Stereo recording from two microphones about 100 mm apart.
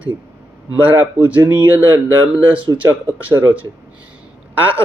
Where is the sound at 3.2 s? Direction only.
15° right (ahead or behind).